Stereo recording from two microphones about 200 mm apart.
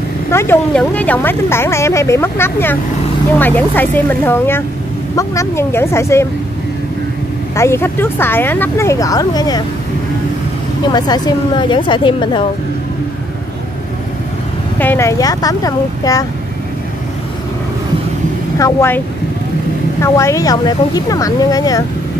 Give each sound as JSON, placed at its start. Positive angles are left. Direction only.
{"t": 0.3, "sound": "speech", "side_deg": 10}
{"t": 7.5, "sound": "speech", "side_deg": 15}
{"t": 10.9, "sound": "a woman's voice", "side_deg": 20}
{"t": 14.8, "sound": "speech", "side_deg": 10}
{"t": 18.6, "sound": "speech", "side_deg": 15}
{"t": 20.0, "sound": "speech", "side_deg": 15}